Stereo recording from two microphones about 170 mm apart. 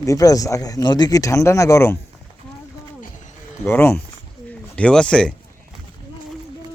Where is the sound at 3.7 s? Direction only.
15° left (ahead or behind).